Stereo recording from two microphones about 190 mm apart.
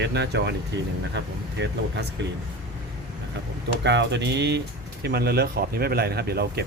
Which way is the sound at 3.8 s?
65° right (ahead or behind).